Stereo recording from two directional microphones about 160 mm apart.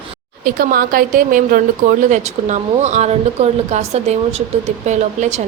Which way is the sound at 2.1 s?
50° right (ahead or behind).